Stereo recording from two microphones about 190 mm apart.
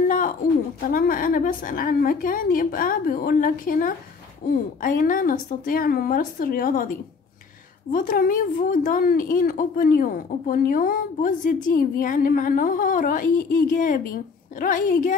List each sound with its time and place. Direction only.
0.0 s a sound: 45° left (ahead or behind)
0.8 s a woman's voice: 50° left (ahead or behind)
7.9 s a woman's voice: 45° left (ahead or behind)